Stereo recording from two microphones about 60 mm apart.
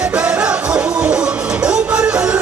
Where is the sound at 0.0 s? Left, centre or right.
Centre.